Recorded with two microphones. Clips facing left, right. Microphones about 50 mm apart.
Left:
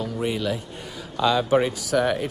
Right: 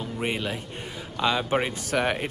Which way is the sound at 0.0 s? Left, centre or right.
Right.